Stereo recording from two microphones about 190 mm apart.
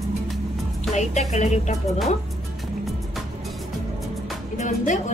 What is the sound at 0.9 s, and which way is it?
Speech, 40° left (ahead or behind).